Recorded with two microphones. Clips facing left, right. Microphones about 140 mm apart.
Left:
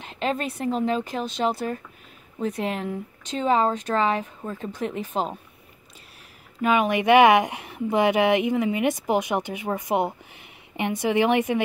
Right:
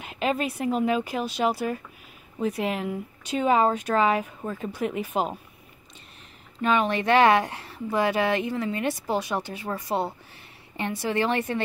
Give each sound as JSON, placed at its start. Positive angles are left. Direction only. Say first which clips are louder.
{"t": 0.0, "sound": "speech", "louder": "right 1 dB", "side_deg": -5}
{"t": 6.6, "sound": "speech", "louder": "left 2 dB", "side_deg": 10}